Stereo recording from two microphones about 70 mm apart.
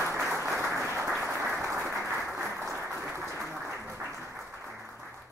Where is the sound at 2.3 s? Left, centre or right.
Right.